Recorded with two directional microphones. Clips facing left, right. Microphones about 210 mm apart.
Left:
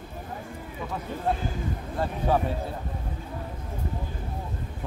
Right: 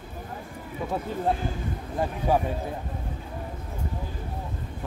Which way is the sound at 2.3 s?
10° right (ahead or behind).